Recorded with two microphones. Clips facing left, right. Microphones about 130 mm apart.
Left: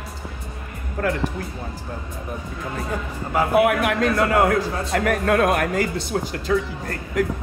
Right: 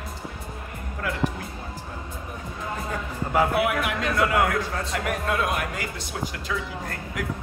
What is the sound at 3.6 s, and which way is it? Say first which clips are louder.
Speech: left 6 dB; 50° left (ahead or behind).